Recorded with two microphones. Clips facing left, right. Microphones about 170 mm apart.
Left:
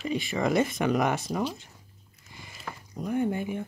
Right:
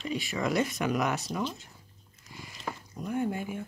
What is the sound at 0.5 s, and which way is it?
Speech, 50° left (ahead or behind).